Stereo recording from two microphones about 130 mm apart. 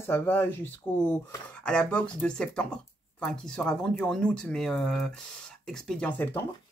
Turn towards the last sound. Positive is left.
turn(degrees=15)  # may be behind; listen again after turning